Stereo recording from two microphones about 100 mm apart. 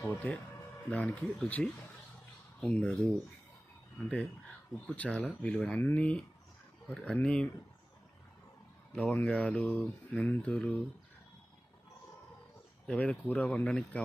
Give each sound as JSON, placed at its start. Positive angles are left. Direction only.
{"t": 0.1, "sound": "speech", "side_deg": 15}
{"t": 4.8, "sound": "speech", "side_deg": 15}
{"t": 9.1, "sound": "speech", "side_deg": 15}
{"t": 12.8, "sound": "speech", "side_deg": 10}